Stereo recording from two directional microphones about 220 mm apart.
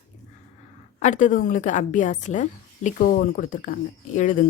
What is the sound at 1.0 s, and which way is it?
A woman's voice, 35° left (ahead or behind).